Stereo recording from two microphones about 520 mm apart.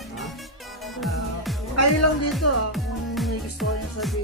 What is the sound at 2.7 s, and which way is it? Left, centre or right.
Music, centre.